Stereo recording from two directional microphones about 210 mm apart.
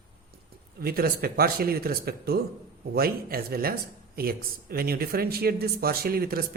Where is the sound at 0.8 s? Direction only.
45° right (ahead or behind).